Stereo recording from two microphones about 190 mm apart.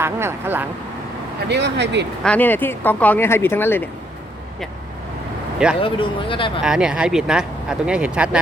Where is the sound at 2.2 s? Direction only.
5° left (ahead or behind).